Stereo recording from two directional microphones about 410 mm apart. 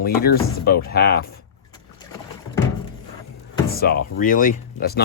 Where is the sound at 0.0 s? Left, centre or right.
Left.